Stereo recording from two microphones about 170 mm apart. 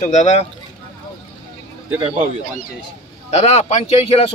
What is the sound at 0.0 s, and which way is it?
Speech, 45° left (ahead or behind).